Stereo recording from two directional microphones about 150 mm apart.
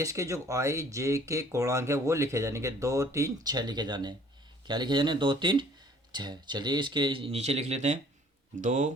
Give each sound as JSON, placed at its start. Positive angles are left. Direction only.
{"t": 0.0, "sound": "speech", "side_deg": -20}